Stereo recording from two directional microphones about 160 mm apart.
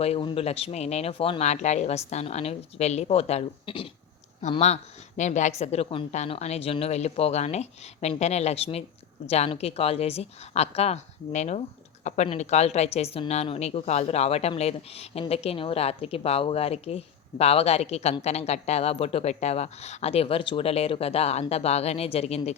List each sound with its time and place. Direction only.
0.0 s a woman's voice: 40° left (ahead or behind)